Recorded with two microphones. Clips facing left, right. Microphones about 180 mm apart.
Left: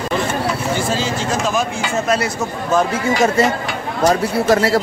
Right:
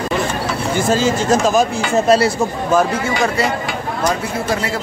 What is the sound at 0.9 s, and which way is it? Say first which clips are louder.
Speech: right 5 dB; 45° right (ahead or behind).